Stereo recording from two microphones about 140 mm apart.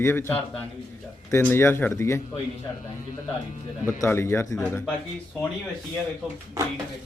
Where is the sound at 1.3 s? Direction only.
15° left (ahead or behind).